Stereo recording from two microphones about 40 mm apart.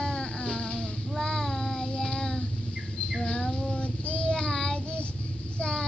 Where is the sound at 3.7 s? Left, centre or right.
Left.